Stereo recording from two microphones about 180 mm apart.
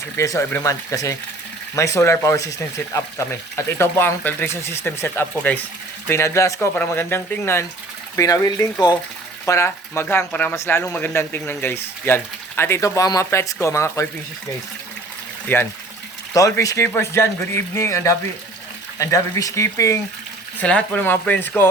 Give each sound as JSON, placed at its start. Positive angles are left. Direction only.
{"t": 0.2, "sound": "speech", "side_deg": 15}
{"t": 15.5, "sound": "speech", "side_deg": 10}